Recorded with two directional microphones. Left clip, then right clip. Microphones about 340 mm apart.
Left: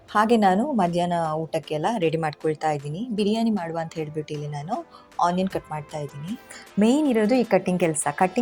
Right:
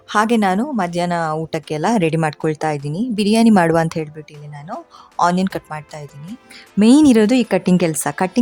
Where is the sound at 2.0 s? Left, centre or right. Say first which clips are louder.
Right 6 dB; right.